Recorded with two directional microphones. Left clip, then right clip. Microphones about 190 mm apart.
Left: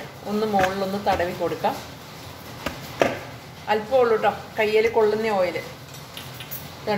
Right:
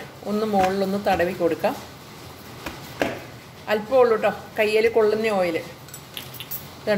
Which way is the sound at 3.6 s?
35° right (ahead or behind).